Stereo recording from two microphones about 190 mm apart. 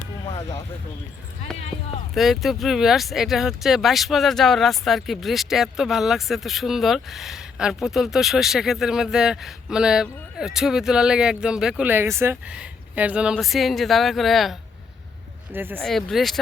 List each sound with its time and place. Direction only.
0.3 s speech: 20° left (ahead or behind)
2.1 s speech: centre (ahead or behind)
15.5 s speech: 10° right (ahead or behind)
15.8 s speech: centre (ahead or behind)